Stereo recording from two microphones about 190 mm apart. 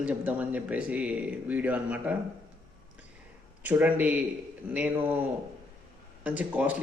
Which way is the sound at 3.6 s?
10° right (ahead or behind).